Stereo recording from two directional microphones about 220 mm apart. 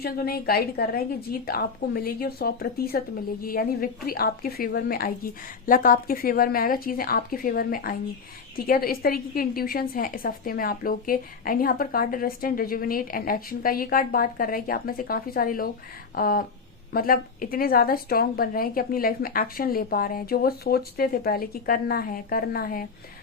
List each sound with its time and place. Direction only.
0.0 s a woman's voice: 45° left (ahead or behind)